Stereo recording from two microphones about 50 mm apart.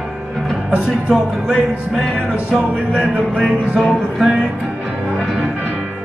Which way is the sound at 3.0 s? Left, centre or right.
Centre.